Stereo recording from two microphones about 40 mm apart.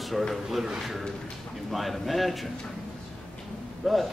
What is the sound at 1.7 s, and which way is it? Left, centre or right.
Speech, centre.